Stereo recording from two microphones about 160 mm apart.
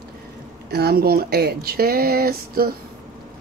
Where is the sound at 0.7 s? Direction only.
80° right.